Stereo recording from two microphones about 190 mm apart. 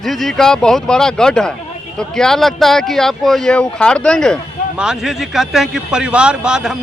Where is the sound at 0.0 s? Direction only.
Centre (ahead or behind).